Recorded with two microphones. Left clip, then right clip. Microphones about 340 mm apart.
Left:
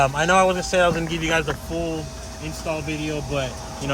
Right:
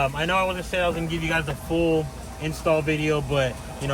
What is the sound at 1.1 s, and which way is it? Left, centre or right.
Speech, left.